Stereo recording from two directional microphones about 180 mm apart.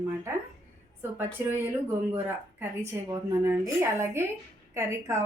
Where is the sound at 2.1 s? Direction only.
10° right (ahead or behind).